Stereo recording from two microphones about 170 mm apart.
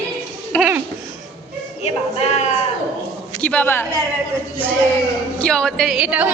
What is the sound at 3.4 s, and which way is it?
Speech, 10° left (ahead or behind).